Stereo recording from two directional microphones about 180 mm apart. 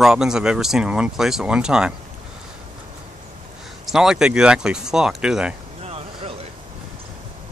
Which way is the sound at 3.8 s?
5° right (ahead or behind).